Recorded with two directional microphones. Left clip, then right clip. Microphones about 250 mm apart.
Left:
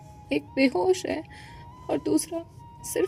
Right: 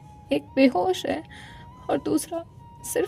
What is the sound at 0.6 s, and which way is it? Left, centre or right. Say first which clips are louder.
Speech: right 2 dB; right.